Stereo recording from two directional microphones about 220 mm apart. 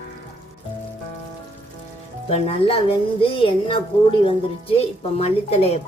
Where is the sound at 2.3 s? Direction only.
25° left (ahead or behind).